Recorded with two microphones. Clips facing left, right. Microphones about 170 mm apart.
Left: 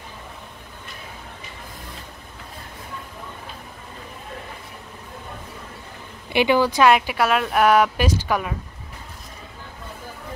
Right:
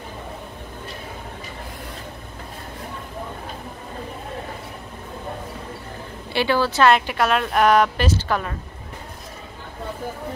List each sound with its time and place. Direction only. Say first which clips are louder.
6.3 s speech: left 2 dB; 15° left (ahead or behind)